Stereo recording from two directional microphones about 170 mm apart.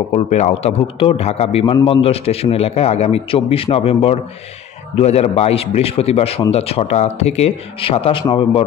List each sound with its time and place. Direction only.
0.1 s a man's voice: 40° left (ahead or behind)